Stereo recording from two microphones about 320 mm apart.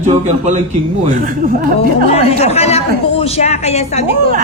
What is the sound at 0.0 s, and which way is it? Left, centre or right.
Speech, right.